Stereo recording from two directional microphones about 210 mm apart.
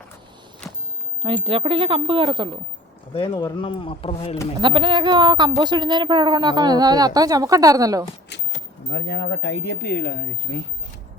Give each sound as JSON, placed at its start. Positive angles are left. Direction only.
{"t": 1.5, "sound": "a woman's voice", "side_deg": -25}
{"t": 3.2, "sound": "speech", "side_deg": 20}
{"t": 4.6, "sound": "a woman's voice", "side_deg": -25}
{"t": 8.3, "sound": "a sound", "side_deg": 55}
{"t": 8.9, "sound": "speech", "side_deg": 55}